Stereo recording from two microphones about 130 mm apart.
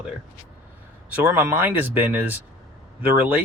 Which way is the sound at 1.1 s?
10° right (ahead or behind).